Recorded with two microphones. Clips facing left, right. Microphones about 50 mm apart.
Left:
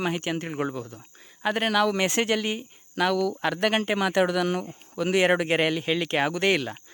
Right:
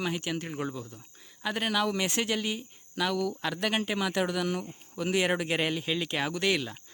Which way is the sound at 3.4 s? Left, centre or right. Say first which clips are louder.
Left 6 dB; left.